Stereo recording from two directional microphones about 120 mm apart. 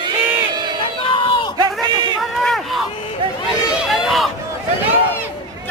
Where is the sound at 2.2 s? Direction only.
Centre (ahead or behind).